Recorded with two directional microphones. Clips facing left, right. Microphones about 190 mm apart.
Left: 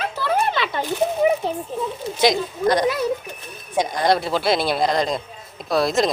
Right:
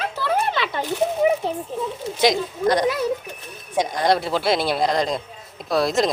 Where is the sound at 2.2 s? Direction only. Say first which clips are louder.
Left 1 dB; 20° right (ahead or behind).